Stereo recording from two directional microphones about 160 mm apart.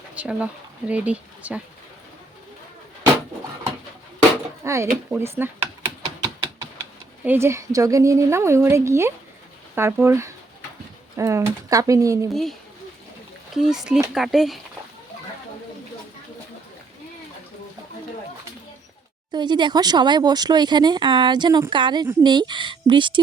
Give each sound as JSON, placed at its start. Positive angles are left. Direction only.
{"t": 0.1, "sound": "speech", "side_deg": -10}
{"t": 4.6, "sound": "speech", "side_deg": -20}
{"t": 5.1, "sound": "a sound", "side_deg": -15}
{"t": 7.3, "sound": "speech", "side_deg": -15}
{"t": 12.3, "sound": "speech", "side_deg": 0}
{"t": 19.3, "sound": "speech", "side_deg": -30}